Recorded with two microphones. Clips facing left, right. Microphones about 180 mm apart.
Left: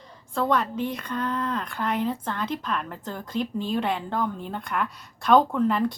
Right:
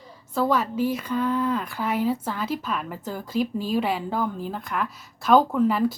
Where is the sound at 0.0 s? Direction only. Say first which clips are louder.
Right 2 dB; 5° right (ahead or behind).